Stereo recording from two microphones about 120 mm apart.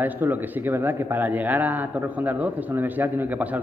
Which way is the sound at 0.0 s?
15° right (ahead or behind).